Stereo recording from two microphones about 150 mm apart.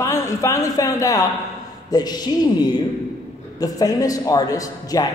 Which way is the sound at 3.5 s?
25° left (ahead or behind).